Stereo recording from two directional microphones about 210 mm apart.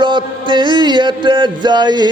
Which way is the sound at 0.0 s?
20° right (ahead or behind).